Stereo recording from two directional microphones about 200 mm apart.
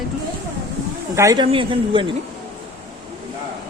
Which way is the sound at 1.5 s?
25° right (ahead or behind).